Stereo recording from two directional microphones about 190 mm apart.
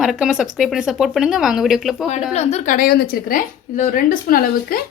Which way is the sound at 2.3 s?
35° left (ahead or behind).